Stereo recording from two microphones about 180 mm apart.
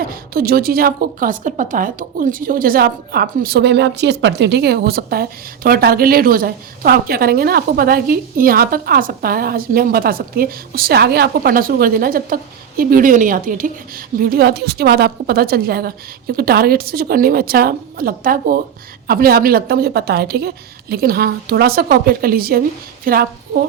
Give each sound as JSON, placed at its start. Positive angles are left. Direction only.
{"t": 0.1, "sound": "a woman's voice", "side_deg": -55}